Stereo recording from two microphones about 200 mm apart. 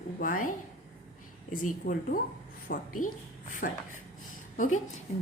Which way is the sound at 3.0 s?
40° left (ahead or behind).